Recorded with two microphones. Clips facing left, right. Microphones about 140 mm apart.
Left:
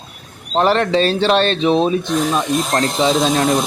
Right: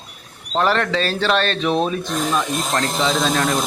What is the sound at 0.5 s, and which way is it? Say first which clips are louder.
Speech: left 4 dB; 30° left (ahead or behind).